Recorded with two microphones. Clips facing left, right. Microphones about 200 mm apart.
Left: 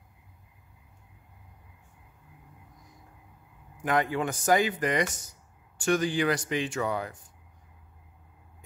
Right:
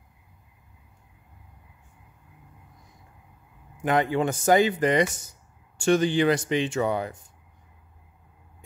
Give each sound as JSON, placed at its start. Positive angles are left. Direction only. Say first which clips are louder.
{"t": 3.8, "sound": "speech", "louder": "right 4 dB", "side_deg": -25}